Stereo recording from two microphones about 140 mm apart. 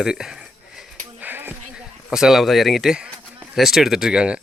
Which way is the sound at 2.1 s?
5° right (ahead or behind).